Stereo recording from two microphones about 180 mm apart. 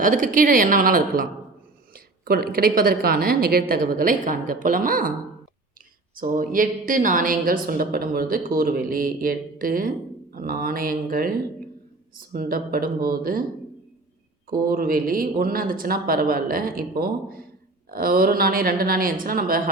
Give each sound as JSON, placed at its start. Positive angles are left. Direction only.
{"t": 0.0, "sound": "a woman's voice", "side_deg": -50}
{"t": 6.1, "sound": "a woman's voice", "side_deg": -50}
{"t": 14.5, "sound": "a woman's voice", "side_deg": -55}